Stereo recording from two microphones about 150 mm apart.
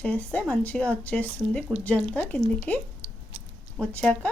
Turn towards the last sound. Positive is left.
turn(degrees=10)  # may be behind; listen again after turning